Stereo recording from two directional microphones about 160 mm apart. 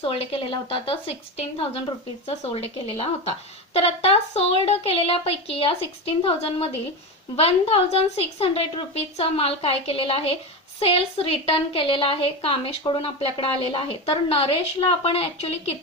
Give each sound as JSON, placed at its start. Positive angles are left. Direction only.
{"t": 0.0, "sound": "a woman's voice", "side_deg": 35}